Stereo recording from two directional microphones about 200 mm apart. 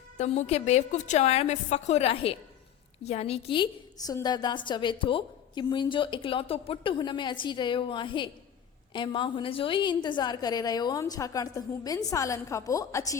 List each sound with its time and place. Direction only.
0.2 s a woman's voice: 35° left (ahead or behind); by 13.1 s 15° left (ahead or behind)